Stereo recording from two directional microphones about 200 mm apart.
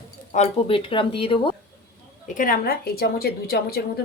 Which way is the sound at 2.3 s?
45° left (ahead or behind).